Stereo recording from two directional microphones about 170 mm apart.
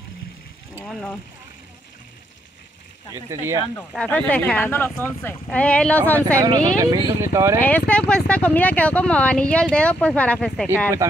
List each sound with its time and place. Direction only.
0.8 s speech: 5° left (ahead or behind)
3.2 s speech: 15° right (ahead or behind)
3.9 s speech: 10° left (ahead or behind)
6.8 s speech: 20° right (ahead or behind)
7.6 s speech: 10° left (ahead or behind)
11.0 s speech: 15° right (ahead or behind)